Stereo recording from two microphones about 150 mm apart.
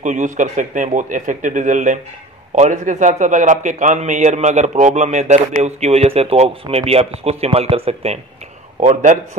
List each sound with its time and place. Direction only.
0.0 s a man's voice: 55° right (ahead or behind)